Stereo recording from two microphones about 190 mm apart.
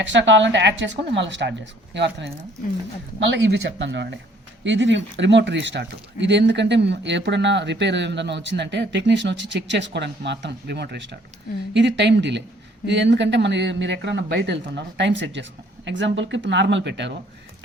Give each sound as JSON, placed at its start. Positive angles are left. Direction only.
{"t": 0.1, "sound": "speech", "side_deg": -75}